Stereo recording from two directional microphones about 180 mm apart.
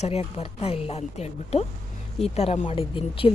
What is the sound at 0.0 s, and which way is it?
A woman's voice, 35° left (ahead or behind).